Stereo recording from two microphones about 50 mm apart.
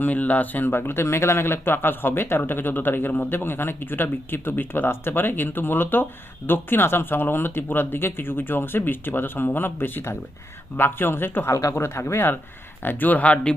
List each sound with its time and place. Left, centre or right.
0.0 s speech: left
1.0 s speech: left
12.8 s speech: left